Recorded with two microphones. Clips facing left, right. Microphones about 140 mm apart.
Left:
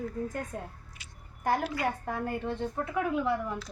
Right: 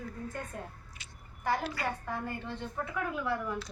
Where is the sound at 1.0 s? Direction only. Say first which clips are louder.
Left 3 dB; 15° left (ahead or behind).